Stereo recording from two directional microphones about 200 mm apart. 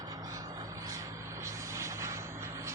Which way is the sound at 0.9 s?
15° right (ahead or behind).